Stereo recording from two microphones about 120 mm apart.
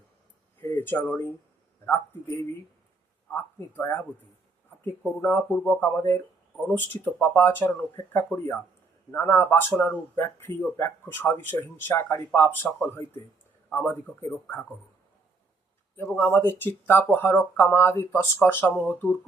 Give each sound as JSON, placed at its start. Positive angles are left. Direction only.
{"t": 0.6, "sound": "a sound", "side_deg": 20}
{"t": 3.2, "sound": "speech", "side_deg": 15}
{"t": 16.0, "sound": "speech", "side_deg": 20}